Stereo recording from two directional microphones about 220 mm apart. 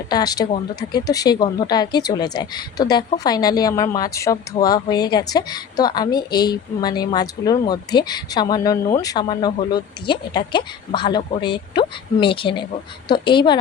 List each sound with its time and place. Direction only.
0.1 s a woman's voice: 20° left (ahead or behind)